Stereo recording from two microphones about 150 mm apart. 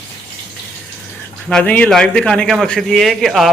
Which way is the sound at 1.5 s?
10° left (ahead or behind).